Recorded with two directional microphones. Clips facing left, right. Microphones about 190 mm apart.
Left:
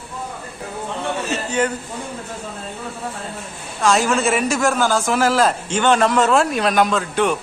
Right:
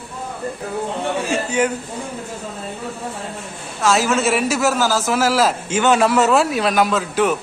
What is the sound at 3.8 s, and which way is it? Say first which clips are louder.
A man's voice: even; centre (ahead or behind).